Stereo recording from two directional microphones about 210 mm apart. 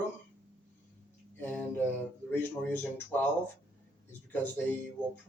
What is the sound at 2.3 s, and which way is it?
Speech, 10° left (ahead or behind).